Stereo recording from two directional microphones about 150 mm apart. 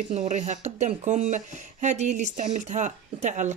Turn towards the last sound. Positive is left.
turn(degrees=-55)  # may be behind; listen again after turning